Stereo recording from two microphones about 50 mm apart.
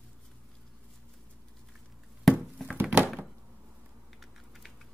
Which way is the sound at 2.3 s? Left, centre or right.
Centre.